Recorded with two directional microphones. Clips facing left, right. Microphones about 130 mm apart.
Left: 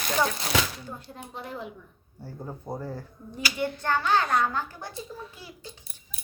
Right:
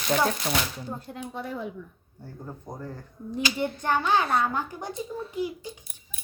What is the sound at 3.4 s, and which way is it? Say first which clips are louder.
A child's voice: right 1 dB; 20° right (ahead or behind).